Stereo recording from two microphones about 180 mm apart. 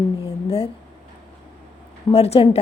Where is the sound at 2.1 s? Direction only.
35° left (ahead or behind).